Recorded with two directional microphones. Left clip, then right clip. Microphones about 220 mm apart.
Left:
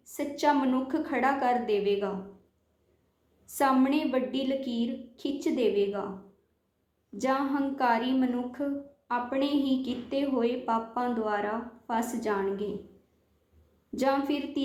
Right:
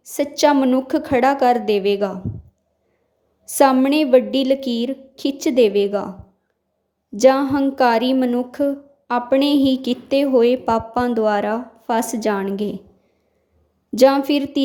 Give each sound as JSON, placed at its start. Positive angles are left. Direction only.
{"t": 0.1, "sound": "a woman's voice", "side_deg": -50}
{"t": 3.5, "sound": "a woman's voice", "side_deg": -50}
{"t": 7.2, "sound": "a woman's voice", "side_deg": -50}
{"t": 13.9, "sound": "a woman's voice", "side_deg": -45}